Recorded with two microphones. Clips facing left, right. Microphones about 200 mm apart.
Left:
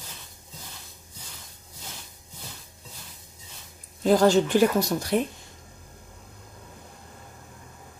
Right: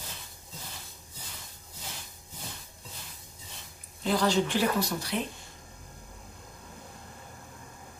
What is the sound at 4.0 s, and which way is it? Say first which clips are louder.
A woman's voice: left 7 dB; 45° left (ahead or behind).